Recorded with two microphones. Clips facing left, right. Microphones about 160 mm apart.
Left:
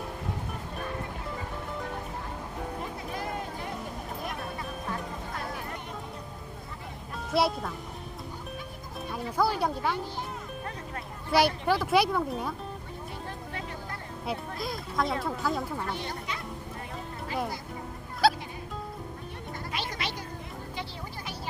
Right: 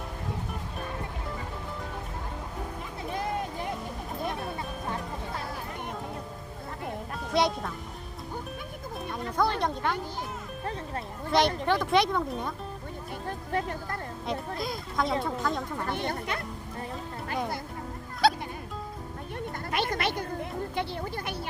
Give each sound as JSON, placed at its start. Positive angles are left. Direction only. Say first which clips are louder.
{"t": 7.3, "sound": "speech", "louder": "even", "side_deg": 5}
{"t": 9.1, "sound": "speech", "louder": "even", "side_deg": 5}
{"t": 11.3, "sound": "speech", "louder": "even", "side_deg": 10}
{"t": 13.5, "sound": "music", "louder": "right 12 dB", "side_deg": -45}
{"t": 14.3, "sound": "music", "louder": "right 1 dB", "side_deg": 0}
{"t": 15.2, "sound": "speech", "louder": "even", "side_deg": 5}
{"t": 15.9, "sound": "speech", "louder": "right 4 dB", "side_deg": -55}
{"t": 18.2, "sound": "music", "louder": "even", "side_deg": 0}
{"t": 19.7, "sound": "cat", "louder": "right 7 dB", "side_deg": -55}